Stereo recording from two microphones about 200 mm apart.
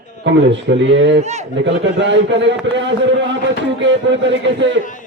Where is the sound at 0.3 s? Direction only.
60° right (ahead or behind).